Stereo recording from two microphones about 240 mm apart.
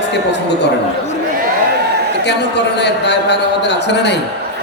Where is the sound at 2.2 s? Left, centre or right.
Left.